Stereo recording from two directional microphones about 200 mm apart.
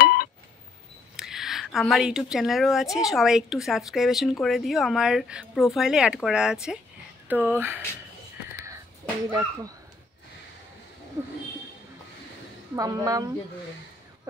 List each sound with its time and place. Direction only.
0.0 s a sound: 50° left (ahead or behind)
1.1 s speech: centre (ahead or behind)
9.3 s speech: 15° right (ahead or behind)
12.7 s speech: 15° right (ahead or behind)